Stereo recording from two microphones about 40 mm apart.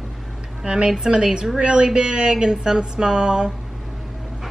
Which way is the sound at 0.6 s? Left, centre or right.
Right.